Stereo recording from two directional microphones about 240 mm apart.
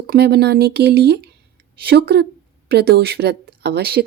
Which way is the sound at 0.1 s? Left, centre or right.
Right.